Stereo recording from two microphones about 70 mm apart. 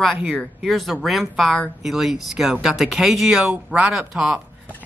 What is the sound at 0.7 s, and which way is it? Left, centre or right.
Speech, centre.